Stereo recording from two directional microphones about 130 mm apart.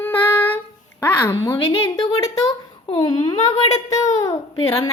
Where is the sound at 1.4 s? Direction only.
25° left (ahead or behind).